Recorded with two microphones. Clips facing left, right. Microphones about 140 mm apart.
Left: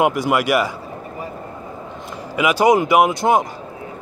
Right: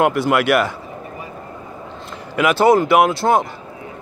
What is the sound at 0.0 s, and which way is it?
Speech, 10° left (ahead or behind).